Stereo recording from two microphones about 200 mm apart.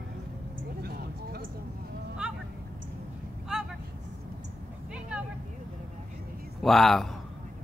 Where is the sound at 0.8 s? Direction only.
50° right (ahead or behind).